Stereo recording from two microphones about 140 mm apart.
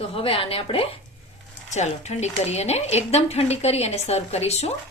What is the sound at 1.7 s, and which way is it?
Speech, 55° left (ahead or behind).